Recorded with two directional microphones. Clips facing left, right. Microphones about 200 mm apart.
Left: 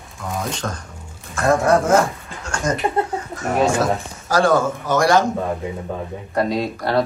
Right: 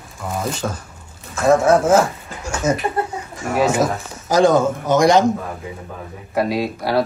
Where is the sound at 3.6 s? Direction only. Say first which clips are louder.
Right 1 dB; 15° right (ahead or behind).